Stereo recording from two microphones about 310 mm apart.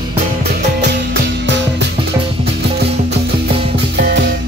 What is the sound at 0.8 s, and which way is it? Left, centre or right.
Music, right.